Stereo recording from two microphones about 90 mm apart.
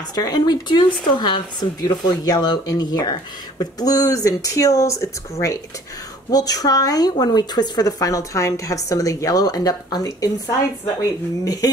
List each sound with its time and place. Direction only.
0.1 s speech: 45° left (ahead or behind)